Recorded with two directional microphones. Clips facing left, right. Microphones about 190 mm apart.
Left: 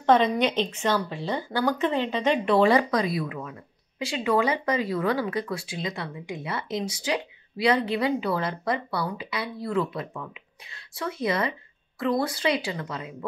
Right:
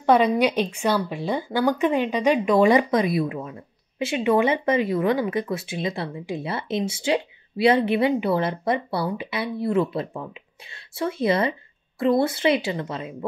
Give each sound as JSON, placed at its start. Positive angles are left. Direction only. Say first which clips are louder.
{"t": 0.0, "sound": "speech", "louder": "right 3 dB", "side_deg": -10}